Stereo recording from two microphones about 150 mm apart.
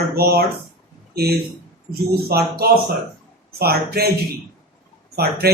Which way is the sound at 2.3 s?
90° right.